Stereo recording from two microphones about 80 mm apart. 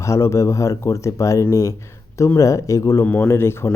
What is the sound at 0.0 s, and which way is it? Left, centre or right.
Speech, left.